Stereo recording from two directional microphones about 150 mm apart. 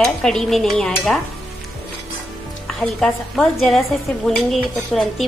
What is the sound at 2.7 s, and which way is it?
Speech, centre (ahead or behind).